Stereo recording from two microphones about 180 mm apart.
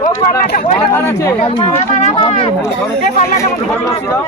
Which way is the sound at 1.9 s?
35° left (ahead or behind).